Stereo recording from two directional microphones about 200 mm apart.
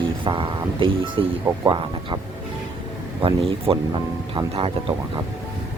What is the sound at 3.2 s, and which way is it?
Speech, 30° right (ahead or behind).